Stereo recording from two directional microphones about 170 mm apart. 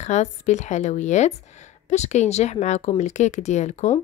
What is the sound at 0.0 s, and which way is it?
Speech, 40° left (ahead or behind).